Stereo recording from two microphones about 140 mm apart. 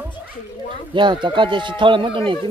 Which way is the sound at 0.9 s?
35° right (ahead or behind).